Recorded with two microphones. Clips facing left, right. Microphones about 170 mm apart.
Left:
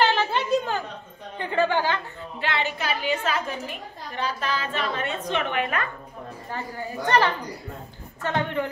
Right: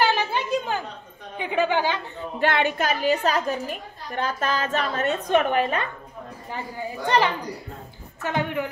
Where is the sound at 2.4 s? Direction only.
50° right (ahead or behind); by 5.9 s 30° right (ahead or behind).